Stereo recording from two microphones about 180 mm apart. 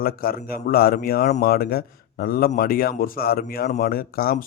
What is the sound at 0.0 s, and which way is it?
A man's voice, 55° left (ahead or behind).